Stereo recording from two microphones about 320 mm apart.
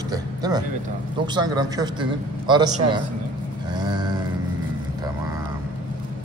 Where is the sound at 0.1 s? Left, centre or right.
Centre.